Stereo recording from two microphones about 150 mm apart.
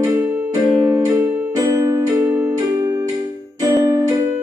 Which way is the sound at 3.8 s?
20° right (ahead or behind).